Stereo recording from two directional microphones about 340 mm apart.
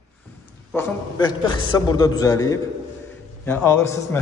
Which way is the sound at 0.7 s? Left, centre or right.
Centre.